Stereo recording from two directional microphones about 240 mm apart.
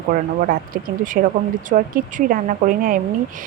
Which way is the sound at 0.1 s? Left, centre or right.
Right.